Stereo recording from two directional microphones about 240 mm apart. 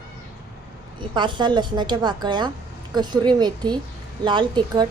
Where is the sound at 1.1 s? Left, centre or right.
Centre.